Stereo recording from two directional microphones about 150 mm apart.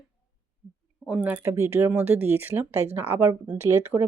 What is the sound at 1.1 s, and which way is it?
Speech, 10° right (ahead or behind).